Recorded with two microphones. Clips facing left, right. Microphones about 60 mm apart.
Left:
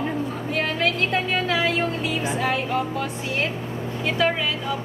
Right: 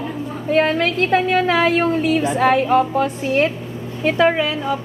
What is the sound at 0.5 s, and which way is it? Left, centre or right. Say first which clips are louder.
A woman's voice: right 7 dB; right.